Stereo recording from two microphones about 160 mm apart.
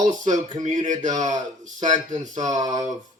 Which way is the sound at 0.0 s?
50° right (ahead or behind).